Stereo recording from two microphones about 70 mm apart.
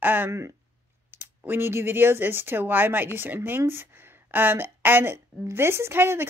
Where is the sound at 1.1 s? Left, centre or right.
Right.